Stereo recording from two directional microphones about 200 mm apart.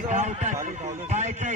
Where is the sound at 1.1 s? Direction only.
35° right (ahead or behind).